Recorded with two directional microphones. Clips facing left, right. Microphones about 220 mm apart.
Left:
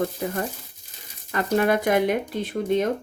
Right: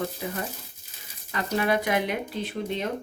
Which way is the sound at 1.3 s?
50° left (ahead or behind).